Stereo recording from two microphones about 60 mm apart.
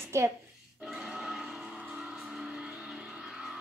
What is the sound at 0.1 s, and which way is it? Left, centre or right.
Speech, right.